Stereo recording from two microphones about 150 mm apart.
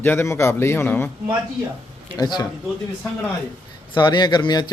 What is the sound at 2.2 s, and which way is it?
Speech, 30° left (ahead or behind).